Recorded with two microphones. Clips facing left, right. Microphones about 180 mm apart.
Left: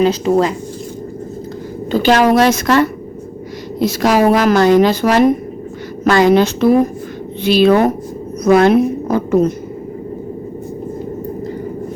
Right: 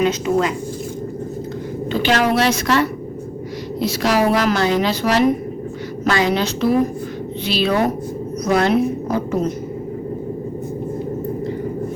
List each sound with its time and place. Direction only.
0.0 s speech: 35° left (ahead or behind)
1.9 s speech: 40° left (ahead or behind)